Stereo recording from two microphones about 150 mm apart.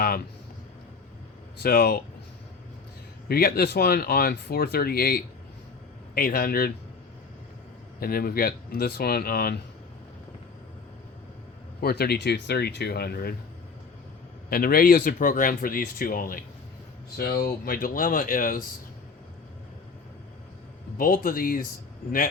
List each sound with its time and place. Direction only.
1.6 s speech: 90° left
3.2 s speech: 85° left
7.9 s speech: 80° left
11.8 s speech: 90° left
14.5 s speech: 80° left
17.2 s speech: 90° left; by 18.6 s 65° left (ahead or behind)
21.0 s speech: 70° left (ahead or behind)